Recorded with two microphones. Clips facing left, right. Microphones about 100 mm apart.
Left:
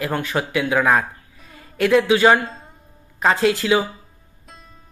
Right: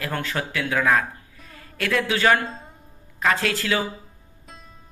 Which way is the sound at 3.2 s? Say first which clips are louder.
Left 5 dB; 20° left (ahead or behind).